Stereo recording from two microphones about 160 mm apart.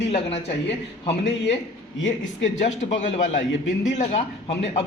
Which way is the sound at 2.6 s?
50° left (ahead or behind).